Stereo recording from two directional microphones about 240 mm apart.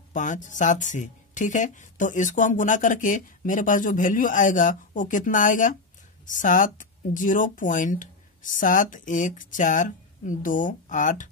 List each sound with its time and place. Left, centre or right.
0.1 s speech: left